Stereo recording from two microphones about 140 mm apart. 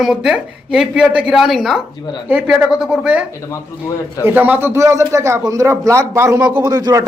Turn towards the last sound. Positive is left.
turn(degrees=-25)  # may be behind; listen again after turning